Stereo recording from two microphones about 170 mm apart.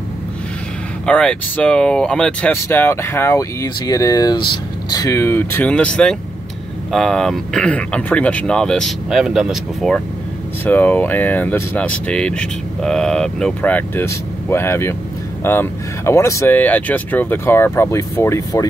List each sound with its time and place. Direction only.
1.0 s speech: 5° left (ahead or behind)